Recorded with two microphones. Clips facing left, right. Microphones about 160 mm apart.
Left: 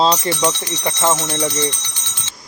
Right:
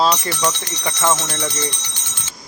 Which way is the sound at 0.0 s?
25° left (ahead or behind).